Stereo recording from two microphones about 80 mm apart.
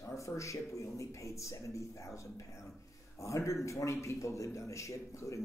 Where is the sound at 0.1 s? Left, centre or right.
Left.